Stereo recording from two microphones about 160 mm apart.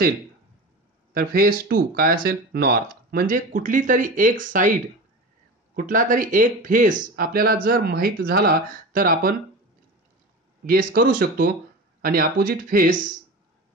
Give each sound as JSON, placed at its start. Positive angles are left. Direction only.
{"t": 1.1, "sound": "speech", "side_deg": -70}
{"t": 5.8, "sound": "speech", "side_deg": -60}
{"t": 10.6, "sound": "speech", "side_deg": -65}